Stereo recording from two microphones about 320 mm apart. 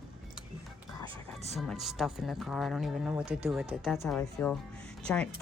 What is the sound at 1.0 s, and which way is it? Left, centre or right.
Speech, centre.